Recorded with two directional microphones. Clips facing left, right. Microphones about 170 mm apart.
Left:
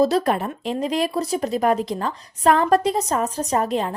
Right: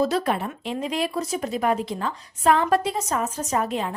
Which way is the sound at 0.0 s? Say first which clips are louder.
Left 4 dB; 40° left (ahead or behind).